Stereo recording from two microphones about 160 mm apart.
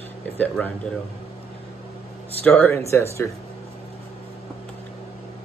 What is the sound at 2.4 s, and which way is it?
Speech, 15° left (ahead or behind).